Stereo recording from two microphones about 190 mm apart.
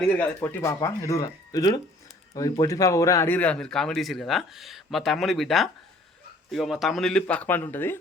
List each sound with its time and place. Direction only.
0.1 s speech: 10° left (ahead or behind)